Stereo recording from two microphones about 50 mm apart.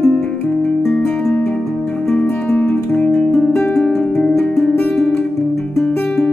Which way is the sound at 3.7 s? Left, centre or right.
Centre.